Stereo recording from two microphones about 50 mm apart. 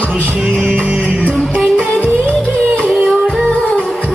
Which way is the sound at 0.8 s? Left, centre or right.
Right.